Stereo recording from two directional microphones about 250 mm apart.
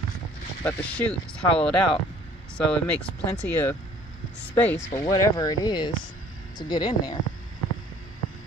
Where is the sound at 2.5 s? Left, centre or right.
Centre.